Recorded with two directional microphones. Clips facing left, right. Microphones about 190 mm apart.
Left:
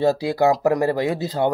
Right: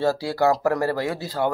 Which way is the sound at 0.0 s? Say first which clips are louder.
Left 3 dB; 20° left (ahead or behind).